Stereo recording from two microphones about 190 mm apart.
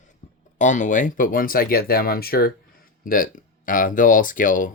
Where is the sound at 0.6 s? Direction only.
40° left (ahead or behind).